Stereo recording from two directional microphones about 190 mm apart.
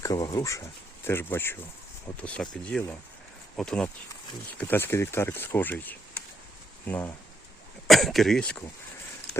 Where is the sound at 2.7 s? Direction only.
5° left (ahead or behind).